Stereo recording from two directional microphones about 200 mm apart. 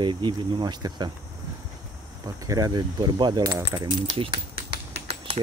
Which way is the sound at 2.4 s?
20° right (ahead or behind).